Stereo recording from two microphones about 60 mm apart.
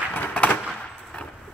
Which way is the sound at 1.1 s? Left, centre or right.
Left.